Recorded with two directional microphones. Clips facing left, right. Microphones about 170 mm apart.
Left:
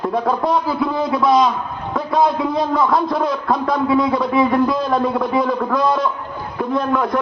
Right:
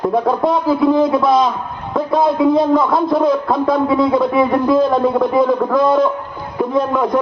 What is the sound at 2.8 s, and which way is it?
Speech, 25° right (ahead or behind).